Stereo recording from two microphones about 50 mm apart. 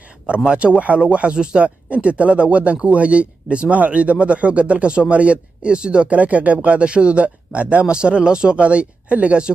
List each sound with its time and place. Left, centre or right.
0.3 s speech: centre